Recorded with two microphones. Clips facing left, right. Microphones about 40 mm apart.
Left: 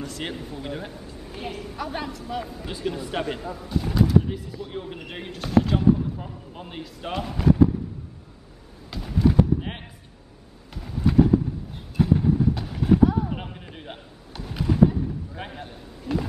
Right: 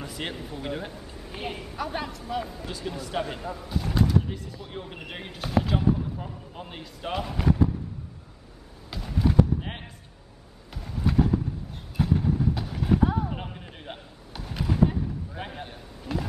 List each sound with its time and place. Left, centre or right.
0.0 s speech: centre
1.3 s a woman's voice: centre
1.8 s speech: centre
2.6 s speech: centre
3.3 s speech: centre
8.9 s clip-clop: centre
9.5 s a sound: centre
10.7 s clip-clop: centre
13.0 s clip-clop: centre
13.3 s a sound: centre